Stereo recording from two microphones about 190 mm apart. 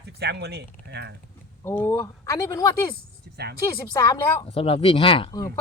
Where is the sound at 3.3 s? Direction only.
60° right (ahead or behind).